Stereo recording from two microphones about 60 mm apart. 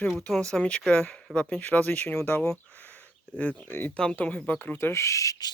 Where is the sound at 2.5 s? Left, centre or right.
Left.